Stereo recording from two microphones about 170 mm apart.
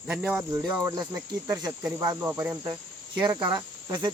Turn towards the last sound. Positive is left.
turn(degrees=-25)  # may be behind; listen again after turning